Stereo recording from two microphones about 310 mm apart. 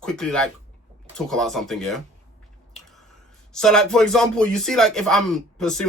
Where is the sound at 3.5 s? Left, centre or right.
Centre.